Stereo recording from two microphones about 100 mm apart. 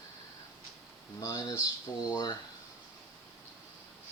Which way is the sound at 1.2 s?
35° left (ahead or behind).